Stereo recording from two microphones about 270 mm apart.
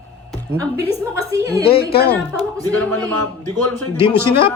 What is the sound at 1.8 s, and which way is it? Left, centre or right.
Speech, left.